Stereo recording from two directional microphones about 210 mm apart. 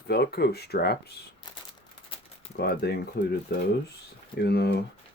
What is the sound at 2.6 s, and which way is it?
Speech, 50° left (ahead or behind).